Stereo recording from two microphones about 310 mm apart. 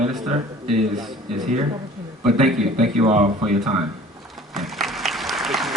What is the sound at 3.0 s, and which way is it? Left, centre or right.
Speech, right.